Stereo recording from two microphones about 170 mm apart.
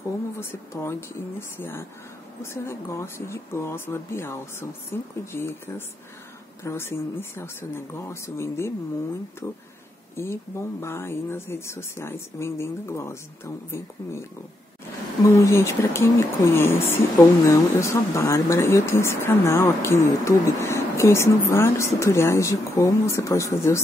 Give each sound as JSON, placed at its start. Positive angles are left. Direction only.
{"t": 0.4, "sound": "speech", "side_deg": 15}
{"t": 10.1, "sound": "speech", "side_deg": 15}
{"t": 15.3, "sound": "speech", "side_deg": 15}